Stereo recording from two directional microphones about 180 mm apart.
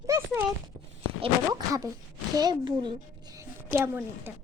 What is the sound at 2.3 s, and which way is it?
A child's voice, 20° right (ahead or behind).